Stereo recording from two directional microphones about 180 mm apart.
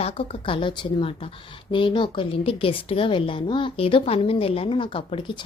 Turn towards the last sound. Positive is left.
turn(degrees=25)  # may be behind; listen again after turning